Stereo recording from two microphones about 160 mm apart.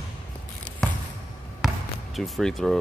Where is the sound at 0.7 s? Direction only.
5° left (ahead or behind).